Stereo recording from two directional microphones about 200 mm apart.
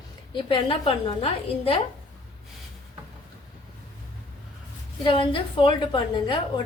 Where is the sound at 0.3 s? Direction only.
25° left (ahead or behind).